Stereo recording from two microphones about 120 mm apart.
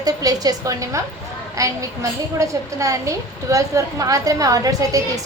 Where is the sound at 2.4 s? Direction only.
25° right (ahead or behind).